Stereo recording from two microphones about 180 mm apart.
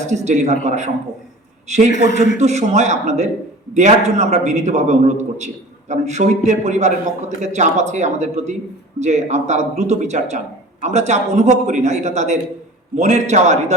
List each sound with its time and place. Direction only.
0.1 s speech: 40° right (ahead or behind)
2.4 s speech: 40° right (ahead or behind)